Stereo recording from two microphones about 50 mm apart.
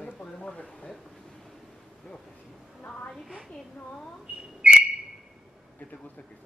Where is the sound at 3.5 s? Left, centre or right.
Centre.